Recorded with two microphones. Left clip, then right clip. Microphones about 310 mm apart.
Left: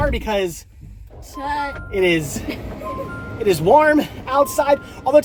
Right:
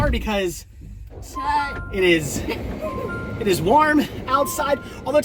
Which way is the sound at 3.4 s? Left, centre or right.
Centre.